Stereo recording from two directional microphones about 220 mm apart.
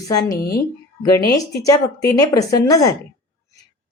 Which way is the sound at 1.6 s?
15° left (ahead or behind).